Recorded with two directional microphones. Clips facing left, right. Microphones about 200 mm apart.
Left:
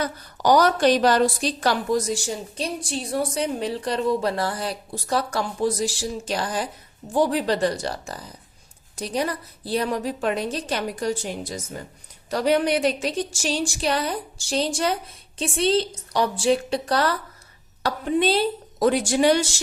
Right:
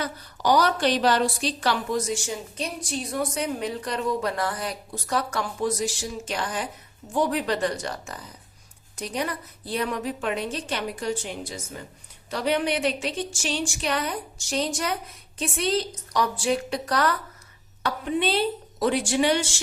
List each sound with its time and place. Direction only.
0.0 s a woman's voice: 45° left (ahead or behind)